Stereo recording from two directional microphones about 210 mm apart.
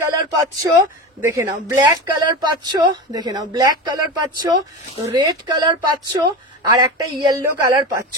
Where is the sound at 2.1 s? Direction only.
20° right (ahead or behind).